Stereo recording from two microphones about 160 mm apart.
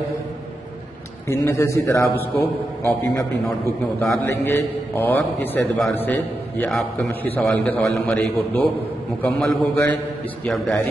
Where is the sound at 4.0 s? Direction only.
15° left (ahead or behind).